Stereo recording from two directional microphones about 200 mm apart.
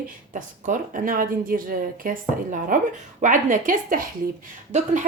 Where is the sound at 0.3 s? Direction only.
40° right (ahead or behind).